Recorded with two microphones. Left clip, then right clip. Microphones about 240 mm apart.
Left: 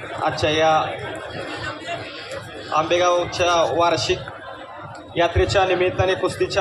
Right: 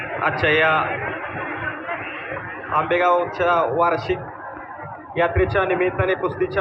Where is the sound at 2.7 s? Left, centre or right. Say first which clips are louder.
Even; left.